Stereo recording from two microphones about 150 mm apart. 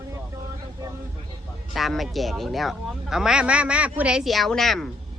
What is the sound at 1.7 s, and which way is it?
Speech, centre (ahead or behind).